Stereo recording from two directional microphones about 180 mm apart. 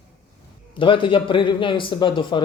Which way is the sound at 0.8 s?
30° left (ahead or behind).